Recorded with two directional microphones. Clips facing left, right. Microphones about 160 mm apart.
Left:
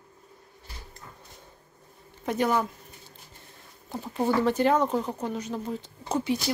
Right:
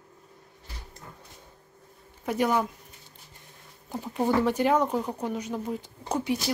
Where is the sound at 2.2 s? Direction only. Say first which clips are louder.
Even; 10° right (ahead or behind).